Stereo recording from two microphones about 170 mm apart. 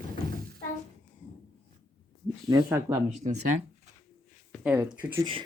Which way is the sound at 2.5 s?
20° right (ahead or behind).